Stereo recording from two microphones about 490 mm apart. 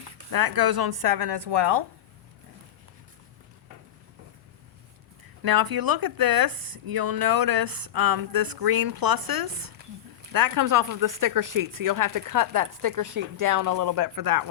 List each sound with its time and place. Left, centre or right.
0.2 s speech: right
5.4 s speech: right